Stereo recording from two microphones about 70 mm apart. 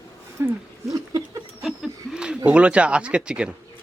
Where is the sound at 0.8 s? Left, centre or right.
Right.